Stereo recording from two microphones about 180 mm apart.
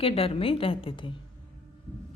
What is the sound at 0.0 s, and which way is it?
A woman's voice, 30° left (ahead or behind).